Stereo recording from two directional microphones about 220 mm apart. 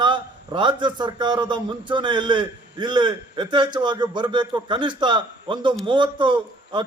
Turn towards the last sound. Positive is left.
turn(degrees=-20)  # may be behind; listen again after turning